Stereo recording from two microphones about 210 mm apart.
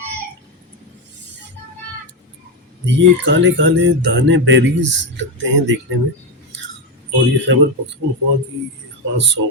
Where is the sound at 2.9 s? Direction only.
60° right (ahead or behind).